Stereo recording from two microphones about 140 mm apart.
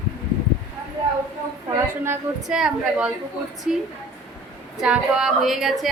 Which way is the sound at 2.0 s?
15° right (ahead or behind).